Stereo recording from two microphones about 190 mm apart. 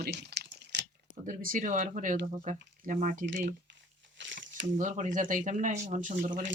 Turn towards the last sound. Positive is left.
turn(degrees=-40)  # may be behind; listen again after turning